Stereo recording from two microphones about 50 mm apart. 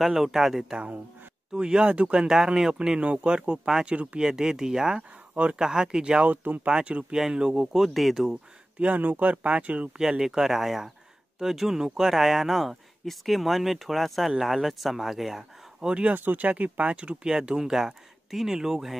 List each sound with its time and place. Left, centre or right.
0.0 s speech: centre; by 2.2 s right
2.2 s speech: centre; by 4.2 s right
4.2 s speech: centre
5.3 s speech: right
6.2 s speech: right
6.7 s speech: right; by 8.4 s centre
8.7 s speech: right
9.0 s speech: right
9.9 s speech: centre
16.1 s speech: right; by 18.9 s centre